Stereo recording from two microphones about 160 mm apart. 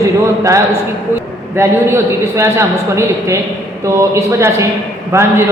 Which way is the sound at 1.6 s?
15° right (ahead or behind).